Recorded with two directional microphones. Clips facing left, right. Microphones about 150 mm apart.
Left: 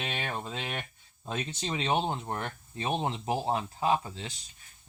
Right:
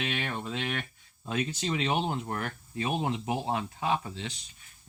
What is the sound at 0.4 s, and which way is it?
Speech, 25° left (ahead or behind).